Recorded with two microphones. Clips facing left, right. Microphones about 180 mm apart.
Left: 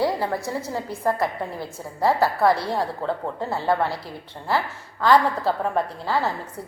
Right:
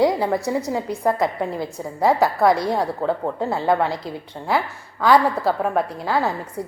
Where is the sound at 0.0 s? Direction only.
15° right (ahead or behind).